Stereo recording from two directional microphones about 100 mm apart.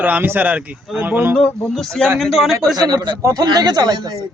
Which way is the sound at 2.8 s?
45° right (ahead or behind).